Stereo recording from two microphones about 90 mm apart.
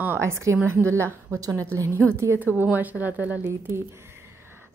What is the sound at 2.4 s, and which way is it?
A woman's voice, 20° right (ahead or behind).